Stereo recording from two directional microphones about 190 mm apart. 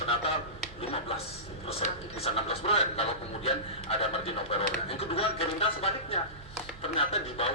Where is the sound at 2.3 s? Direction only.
30° left (ahead or behind).